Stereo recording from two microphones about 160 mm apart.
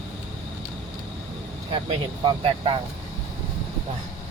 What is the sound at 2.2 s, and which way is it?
Speech, 35° right (ahead or behind).